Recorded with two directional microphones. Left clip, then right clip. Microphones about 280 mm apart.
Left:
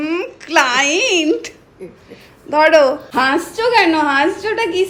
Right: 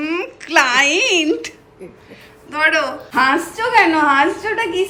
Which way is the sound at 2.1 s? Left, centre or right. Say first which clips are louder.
Left 10 dB; centre.